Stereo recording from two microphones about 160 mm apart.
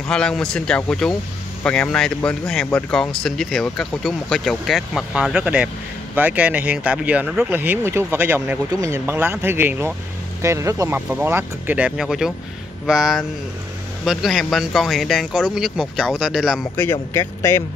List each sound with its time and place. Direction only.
0.1 s speech: 5° left (ahead or behind)
16.7 s speech: 15° left (ahead or behind)